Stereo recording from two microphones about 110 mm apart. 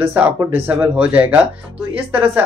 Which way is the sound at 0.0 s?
20° right (ahead or behind).